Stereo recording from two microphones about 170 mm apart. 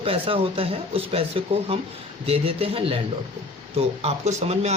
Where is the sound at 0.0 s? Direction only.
35° right (ahead or behind).